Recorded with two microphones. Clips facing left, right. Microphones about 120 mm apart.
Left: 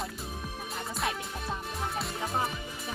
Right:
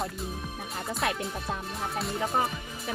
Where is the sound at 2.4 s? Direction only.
70° right (ahead or behind).